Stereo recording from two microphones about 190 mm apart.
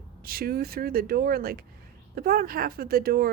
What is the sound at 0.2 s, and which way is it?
Speech, 50° right (ahead or behind).